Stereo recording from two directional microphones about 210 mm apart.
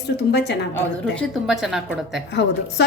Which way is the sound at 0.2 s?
55° left (ahead or behind).